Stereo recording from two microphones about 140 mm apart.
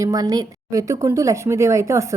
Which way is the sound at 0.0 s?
25° right (ahead or behind).